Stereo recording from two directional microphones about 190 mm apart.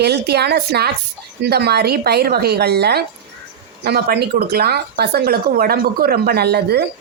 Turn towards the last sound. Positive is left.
turn(degrees=-60)  # may be behind; listen again after turning